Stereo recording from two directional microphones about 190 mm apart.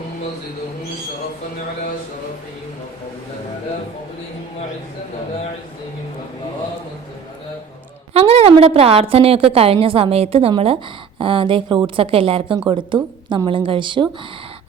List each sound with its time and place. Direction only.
8.1 s a woman's voice: 30° right (ahead or behind)